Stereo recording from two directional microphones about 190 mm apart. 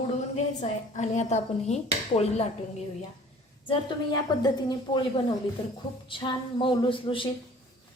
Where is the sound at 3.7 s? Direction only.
25° left (ahead or behind).